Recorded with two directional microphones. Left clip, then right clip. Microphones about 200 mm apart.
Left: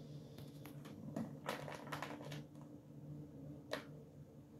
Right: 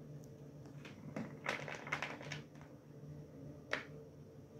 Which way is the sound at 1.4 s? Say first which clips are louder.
Right 6 dB; centre (ahead or behind).